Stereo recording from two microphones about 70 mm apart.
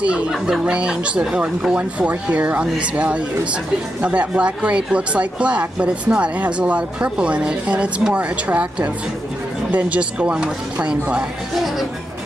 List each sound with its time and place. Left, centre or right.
0.3 s speech: centre